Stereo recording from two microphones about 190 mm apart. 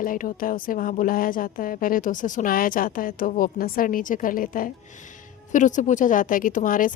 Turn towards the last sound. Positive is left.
turn(degrees=45)  # may be behind; listen again after turning